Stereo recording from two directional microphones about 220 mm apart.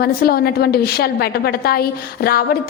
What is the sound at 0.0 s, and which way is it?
A woman's voice, 45° left (ahead or behind).